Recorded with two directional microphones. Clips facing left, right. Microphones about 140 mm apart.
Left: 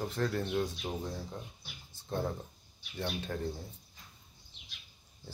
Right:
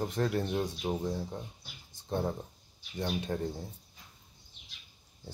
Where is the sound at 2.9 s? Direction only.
20° right (ahead or behind).